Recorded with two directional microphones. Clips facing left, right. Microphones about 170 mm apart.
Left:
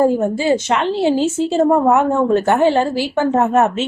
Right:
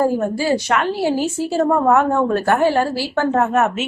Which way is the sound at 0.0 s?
20° left (ahead or behind).